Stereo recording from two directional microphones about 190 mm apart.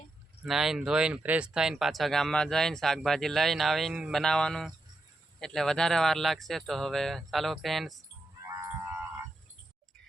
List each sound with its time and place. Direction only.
0.4 s speech: centre (ahead or behind)
8.4 s livestock: 15° right (ahead or behind)